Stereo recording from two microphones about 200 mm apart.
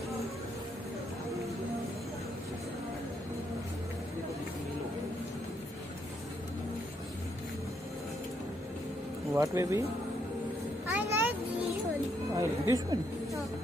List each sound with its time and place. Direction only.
9.3 s speech: 15° right (ahead or behind)
11.0 s music: 10° right (ahead or behind)
12.4 s chatter: 15° right (ahead or behind)